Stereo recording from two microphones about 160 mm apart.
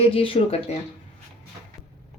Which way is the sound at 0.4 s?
35° left (ahead or behind).